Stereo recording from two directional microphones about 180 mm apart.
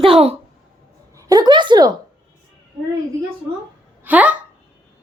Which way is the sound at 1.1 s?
20° right (ahead or behind).